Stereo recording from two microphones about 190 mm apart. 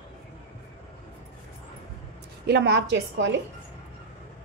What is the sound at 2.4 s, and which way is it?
Speech, 65° right (ahead or behind).